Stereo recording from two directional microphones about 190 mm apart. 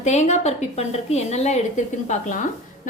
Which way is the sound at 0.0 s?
35° left (ahead or behind).